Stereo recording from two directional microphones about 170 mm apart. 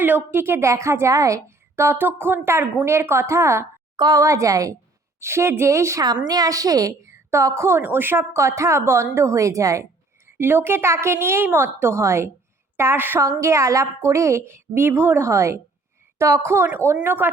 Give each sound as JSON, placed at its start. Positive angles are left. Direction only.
{"t": 0.0, "sound": "speech", "side_deg": -10}